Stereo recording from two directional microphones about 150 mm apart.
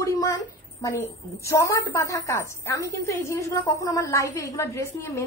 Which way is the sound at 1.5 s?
20° left (ahead or behind).